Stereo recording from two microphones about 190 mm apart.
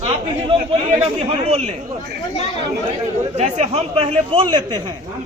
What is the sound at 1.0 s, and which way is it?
Speech, 35° right (ahead or behind).